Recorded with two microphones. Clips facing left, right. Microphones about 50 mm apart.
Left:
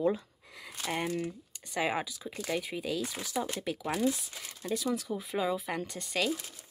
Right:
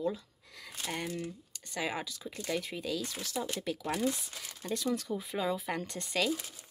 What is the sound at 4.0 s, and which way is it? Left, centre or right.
Speech, centre.